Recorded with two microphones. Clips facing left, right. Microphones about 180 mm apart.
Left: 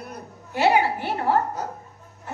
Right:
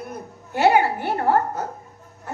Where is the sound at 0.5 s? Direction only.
50° right (ahead or behind).